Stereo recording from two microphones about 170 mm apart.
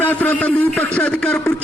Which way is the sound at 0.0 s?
10° left (ahead or behind).